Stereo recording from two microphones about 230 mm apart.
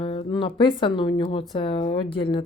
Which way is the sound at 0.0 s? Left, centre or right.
Left.